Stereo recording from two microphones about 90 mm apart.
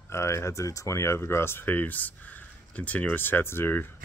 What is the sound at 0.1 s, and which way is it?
Speech, 30° left (ahead or behind).